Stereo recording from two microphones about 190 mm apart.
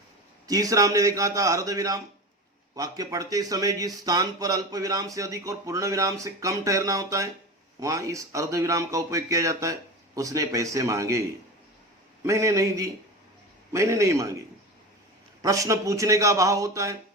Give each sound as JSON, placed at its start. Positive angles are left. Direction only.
{"t": 0.4, "sound": "speech", "side_deg": -20}
{"t": 12.2, "sound": "speech", "side_deg": -15}
{"t": 15.4, "sound": "speech", "side_deg": -15}